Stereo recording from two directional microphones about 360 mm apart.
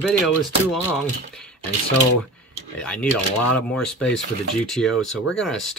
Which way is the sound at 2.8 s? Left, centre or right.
Centre.